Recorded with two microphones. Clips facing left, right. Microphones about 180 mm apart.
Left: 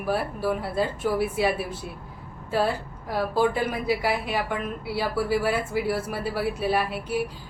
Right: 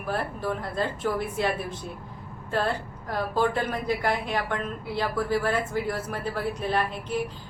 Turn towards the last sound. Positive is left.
turn(degrees=10)  # may be behind; listen again after turning